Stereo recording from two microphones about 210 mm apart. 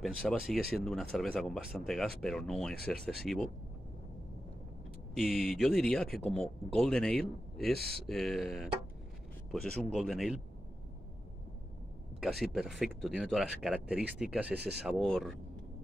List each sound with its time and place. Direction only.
0.0 s speech: centre (ahead or behind)
5.1 s speech: centre (ahead or behind)
9.9 s speech: centre (ahead or behind)
12.2 s speech: centre (ahead or behind)
14.5 s speech: 50° right (ahead or behind)
14.8 s speech: centre (ahead or behind)